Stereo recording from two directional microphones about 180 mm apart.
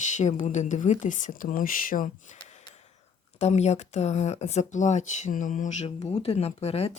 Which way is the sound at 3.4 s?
40° left (ahead or behind).